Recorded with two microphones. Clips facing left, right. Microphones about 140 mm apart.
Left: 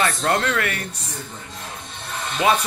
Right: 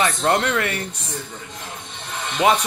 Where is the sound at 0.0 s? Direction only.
20° right (ahead or behind).